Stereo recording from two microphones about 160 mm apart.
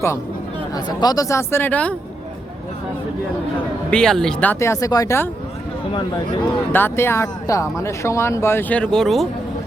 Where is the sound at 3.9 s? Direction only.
5° left (ahead or behind).